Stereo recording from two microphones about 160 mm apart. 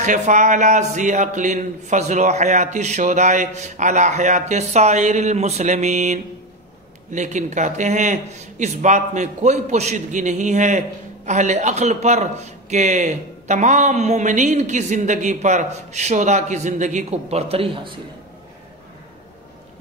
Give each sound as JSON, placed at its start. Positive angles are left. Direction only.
{"t": 0.0, "sound": "a man's voice", "side_deg": -50}